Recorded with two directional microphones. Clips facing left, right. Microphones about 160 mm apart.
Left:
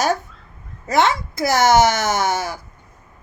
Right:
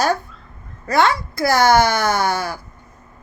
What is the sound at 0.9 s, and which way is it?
A child's voice, 20° left (ahead or behind).